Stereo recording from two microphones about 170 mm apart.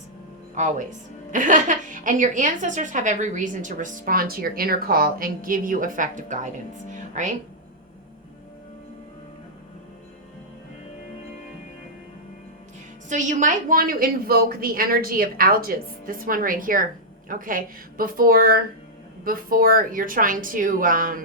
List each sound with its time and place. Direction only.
0.5 s a woman's voice: 45° right (ahead or behind)
13.1 s a woman's voice: 45° right (ahead or behind)